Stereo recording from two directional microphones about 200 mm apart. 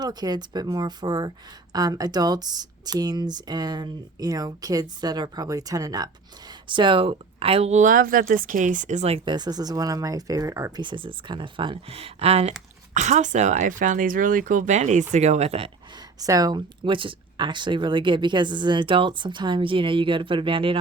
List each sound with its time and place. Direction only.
0.0 s speech: 20° right (ahead or behind)
16.2 s speech: 15° right (ahead or behind)